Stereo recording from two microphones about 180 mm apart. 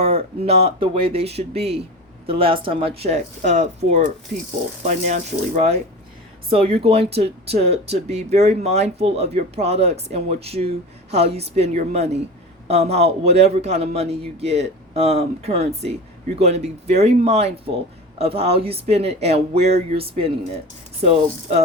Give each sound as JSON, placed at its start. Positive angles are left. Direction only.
{"t": 0.0, "sound": "speech", "side_deg": -35}